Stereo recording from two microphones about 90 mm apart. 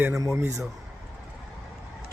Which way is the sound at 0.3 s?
30° right (ahead or behind).